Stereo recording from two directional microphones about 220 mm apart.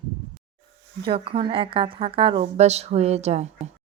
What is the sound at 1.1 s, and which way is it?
A woman's voice, 25° right (ahead or behind).